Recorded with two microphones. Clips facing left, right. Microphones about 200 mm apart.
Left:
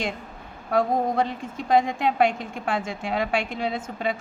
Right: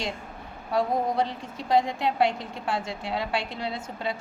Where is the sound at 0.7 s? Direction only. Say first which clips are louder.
Left 3 dB; 50° left (ahead or behind).